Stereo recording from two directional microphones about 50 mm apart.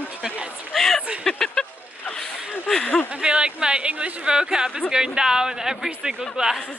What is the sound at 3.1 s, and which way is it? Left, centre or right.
Speech, centre.